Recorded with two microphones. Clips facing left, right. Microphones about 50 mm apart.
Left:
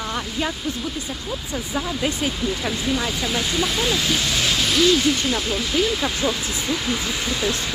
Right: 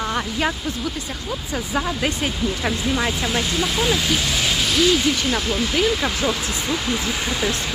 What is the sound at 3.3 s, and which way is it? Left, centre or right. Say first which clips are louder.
Speech: right 1 dB; centre.